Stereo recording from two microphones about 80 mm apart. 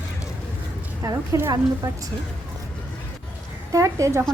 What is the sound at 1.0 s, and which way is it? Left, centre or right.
Speech, right.